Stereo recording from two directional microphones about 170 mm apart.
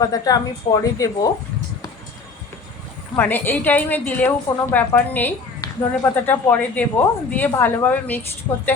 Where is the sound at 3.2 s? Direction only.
10° left (ahead or behind).